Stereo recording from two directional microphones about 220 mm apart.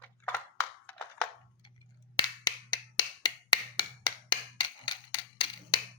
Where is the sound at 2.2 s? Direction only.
20° left (ahead or behind).